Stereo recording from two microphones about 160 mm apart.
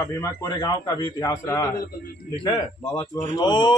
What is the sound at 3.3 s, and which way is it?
Speech, 25° left (ahead or behind).